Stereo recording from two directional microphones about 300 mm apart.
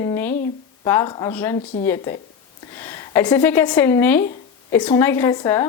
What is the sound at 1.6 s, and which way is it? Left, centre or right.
Speech, centre.